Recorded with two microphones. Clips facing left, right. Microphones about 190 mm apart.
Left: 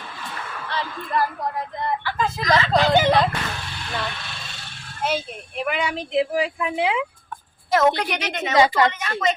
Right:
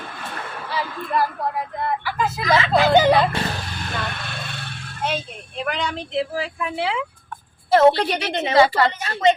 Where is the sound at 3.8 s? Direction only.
55° right (ahead or behind).